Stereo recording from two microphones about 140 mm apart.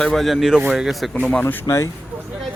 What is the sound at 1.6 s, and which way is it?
Speech, 20° left (ahead or behind).